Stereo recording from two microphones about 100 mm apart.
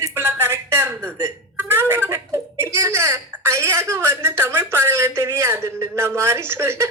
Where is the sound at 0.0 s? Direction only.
25° right (ahead or behind).